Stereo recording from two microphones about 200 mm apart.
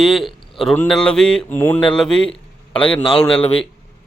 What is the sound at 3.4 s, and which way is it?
Speech, 30° left (ahead or behind).